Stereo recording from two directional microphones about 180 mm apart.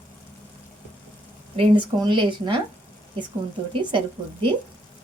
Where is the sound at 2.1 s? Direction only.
25° right (ahead or behind).